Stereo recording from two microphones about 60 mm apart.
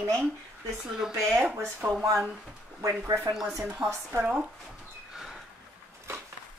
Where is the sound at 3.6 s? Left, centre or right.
Centre.